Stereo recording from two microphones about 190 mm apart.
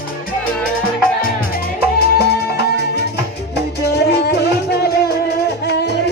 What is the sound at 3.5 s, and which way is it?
Music, 60° left (ahead or behind).